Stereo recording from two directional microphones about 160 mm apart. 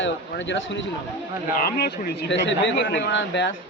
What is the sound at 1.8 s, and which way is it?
Speech, 75° left (ahead or behind).